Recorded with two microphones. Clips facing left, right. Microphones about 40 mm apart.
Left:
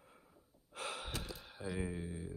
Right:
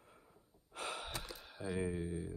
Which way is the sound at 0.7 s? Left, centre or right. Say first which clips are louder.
Even; centre.